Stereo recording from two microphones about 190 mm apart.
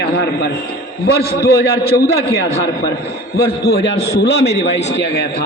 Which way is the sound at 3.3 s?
55° left (ahead or behind).